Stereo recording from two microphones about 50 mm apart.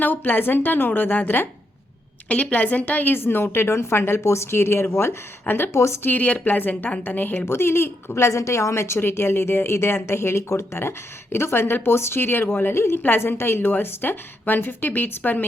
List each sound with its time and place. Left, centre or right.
0.0 s a woman's voice: left
2.3 s a woman's voice: left
3.2 s a woman's voice: left
4.2 s a woman's voice: left
5.5 s a woman's voice: left
5.7 s speech: left
6.0 s a woman's voice: left
7.4 s a woman's voice: left